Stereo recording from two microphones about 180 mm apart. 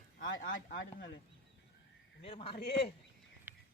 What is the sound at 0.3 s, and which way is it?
Speech, 90° left.